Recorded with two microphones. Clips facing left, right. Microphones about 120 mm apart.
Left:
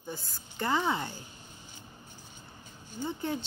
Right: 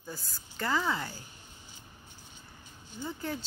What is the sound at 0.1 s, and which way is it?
Speech, 20° left (ahead or behind).